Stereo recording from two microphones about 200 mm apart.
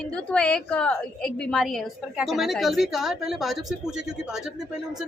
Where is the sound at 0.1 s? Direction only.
5° left (ahead or behind).